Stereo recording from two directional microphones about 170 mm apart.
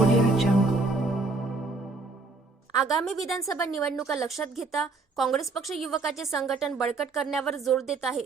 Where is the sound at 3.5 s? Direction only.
20° left (ahead or behind).